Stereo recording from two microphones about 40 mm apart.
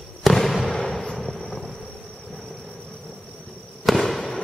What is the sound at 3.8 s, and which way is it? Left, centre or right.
Fireworks, centre.